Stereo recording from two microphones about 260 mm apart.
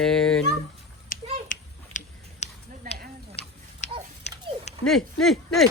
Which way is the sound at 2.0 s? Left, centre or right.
Left.